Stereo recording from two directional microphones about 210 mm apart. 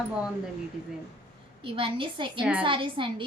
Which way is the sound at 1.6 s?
25° right (ahead or behind).